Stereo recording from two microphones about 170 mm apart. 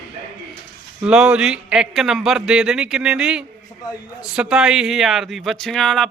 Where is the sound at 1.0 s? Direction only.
5° right (ahead or behind).